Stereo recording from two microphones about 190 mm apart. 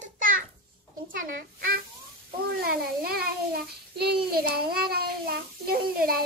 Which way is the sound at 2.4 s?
55° right (ahead or behind).